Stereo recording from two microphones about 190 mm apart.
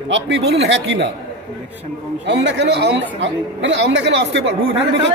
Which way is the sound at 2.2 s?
70° right (ahead or behind).